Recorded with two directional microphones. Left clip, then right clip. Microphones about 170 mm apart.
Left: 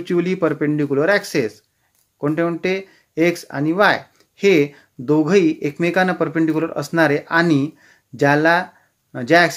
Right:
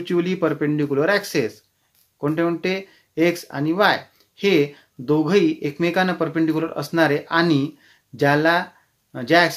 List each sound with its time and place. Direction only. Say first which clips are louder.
0.0 s speech: left 2 dB; 30° left (ahead or behind)